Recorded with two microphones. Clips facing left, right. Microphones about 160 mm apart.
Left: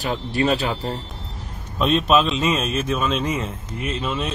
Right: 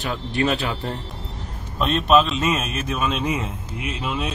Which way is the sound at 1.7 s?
Centre (ahead or behind).